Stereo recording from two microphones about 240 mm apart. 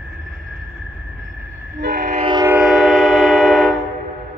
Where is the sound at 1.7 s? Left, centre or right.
Right.